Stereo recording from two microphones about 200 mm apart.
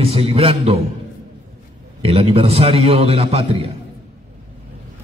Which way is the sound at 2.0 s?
30° right (ahead or behind).